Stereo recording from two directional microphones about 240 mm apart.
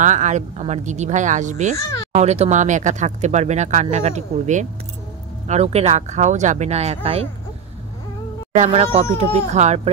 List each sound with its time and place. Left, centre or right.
0.0 s speech: right
8.5 s speech: right